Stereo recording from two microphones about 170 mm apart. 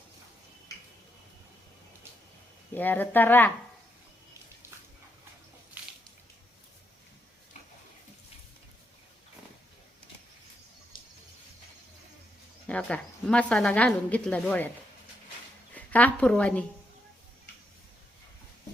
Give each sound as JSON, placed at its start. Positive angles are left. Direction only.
{"t": 2.7, "sound": "a woman's voice", "side_deg": 10}
{"t": 10.9, "sound": "a sound", "side_deg": 30}
{"t": 12.6, "sound": "a woman's voice", "side_deg": 5}
{"t": 15.7, "sound": "a woman's voice", "side_deg": 10}